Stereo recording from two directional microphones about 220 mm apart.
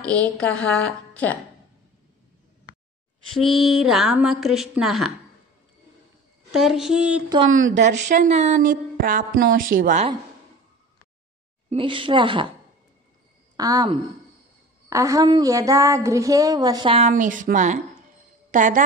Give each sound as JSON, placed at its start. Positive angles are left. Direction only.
{"t": 0.4, "sound": "a woman's voice", "side_deg": 5}
{"t": 3.3, "sound": "a woman's voice", "side_deg": 0}
{"t": 6.5, "sound": "a woman's voice", "side_deg": 0}
{"t": 7.5, "sound": "a woman's voice", "side_deg": -60}
{"t": 7.8, "sound": "a woman's voice", "side_deg": -30}
{"t": 11.7, "sound": "a woman's voice", "side_deg": -25}
{"t": 13.6, "sound": "a woman's voice", "side_deg": -15}